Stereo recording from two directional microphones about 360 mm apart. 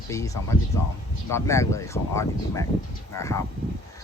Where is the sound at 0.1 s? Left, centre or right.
Centre.